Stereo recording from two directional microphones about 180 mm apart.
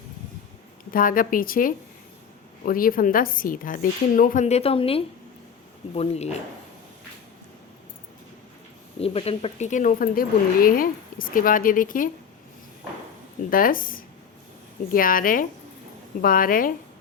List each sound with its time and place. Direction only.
0.9 s speech: 50° left (ahead or behind)
9.0 s speech: 35° left (ahead or behind); by 12.1 s 50° left (ahead or behind)
13.5 s speech: 50° left (ahead or behind)